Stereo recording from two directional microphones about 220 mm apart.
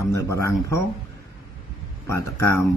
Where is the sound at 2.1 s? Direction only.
10° left (ahead or behind).